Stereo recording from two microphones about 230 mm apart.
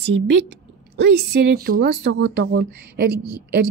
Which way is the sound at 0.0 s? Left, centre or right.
Right.